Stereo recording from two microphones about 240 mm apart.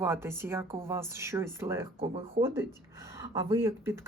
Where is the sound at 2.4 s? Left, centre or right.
Right.